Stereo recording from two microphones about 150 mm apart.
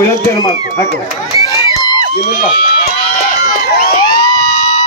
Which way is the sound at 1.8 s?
30° left (ahead or behind).